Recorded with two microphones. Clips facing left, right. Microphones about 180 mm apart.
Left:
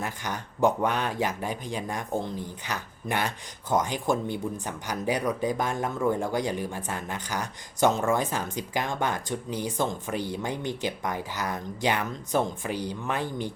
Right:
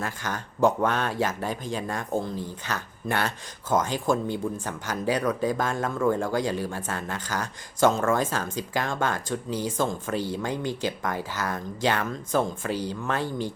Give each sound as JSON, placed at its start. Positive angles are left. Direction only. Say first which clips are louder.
{"t": 0.0, "sound": "speech", "louder": "right 1 dB", "side_deg": 15}